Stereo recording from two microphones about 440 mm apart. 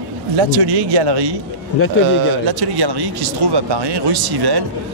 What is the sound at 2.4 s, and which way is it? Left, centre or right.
Speech, right.